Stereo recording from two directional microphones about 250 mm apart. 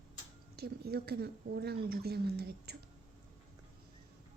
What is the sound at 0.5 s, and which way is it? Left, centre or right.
Speech, right.